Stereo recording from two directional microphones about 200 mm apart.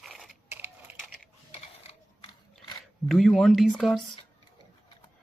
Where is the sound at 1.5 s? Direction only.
25° left (ahead or behind).